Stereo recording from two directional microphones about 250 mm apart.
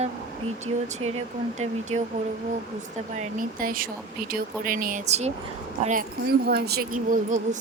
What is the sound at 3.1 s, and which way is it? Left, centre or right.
Speech, right.